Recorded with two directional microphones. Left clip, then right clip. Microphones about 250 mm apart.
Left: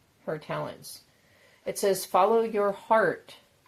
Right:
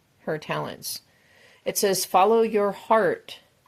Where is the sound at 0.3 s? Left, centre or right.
Right.